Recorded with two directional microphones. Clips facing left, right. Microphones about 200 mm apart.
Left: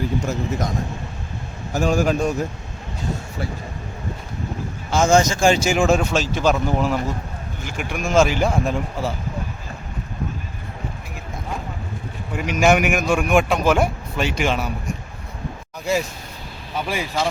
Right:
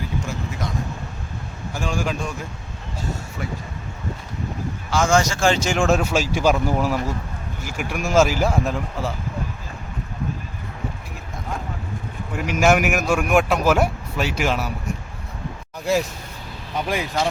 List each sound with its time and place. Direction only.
0.2 s a man's voice: 40° left (ahead or behind)
1.7 s speech: 40° left (ahead or behind)
4.9 s a man's voice: 20° left (ahead or behind); by 9.1 s centre (ahead or behind)
12.4 s a man's voice: centre (ahead or behind)
16.7 s speech: 5° left (ahead or behind)